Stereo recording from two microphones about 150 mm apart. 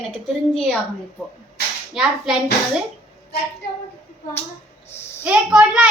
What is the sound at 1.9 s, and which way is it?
Speech, 5° right (ahead or behind).